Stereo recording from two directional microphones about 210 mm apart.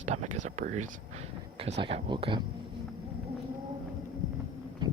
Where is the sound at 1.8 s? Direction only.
25° right (ahead or behind).